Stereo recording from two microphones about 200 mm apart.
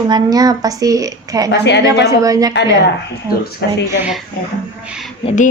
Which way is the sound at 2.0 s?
15° right (ahead or behind).